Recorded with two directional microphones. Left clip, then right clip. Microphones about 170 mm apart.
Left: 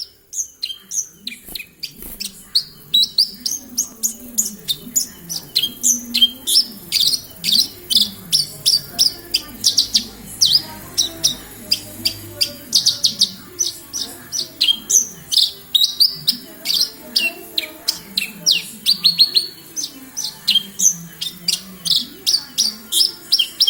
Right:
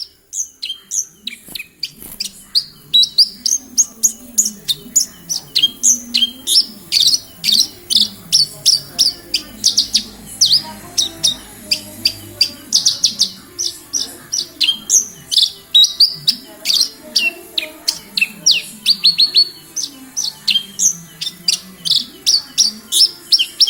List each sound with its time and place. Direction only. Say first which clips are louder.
0.6 s chirp: right 3 dB; 20° right (ahead or behind)
4.0 s bird: right 6 dB; 20° right (ahead or behind)
9.6 s chirp: right 2 dB; 20° right (ahead or behind)
11.7 s owl: right 3 dB; 20° right (ahead or behind)
13.0 s chirp: right 1 dB; 20° right (ahead or behind)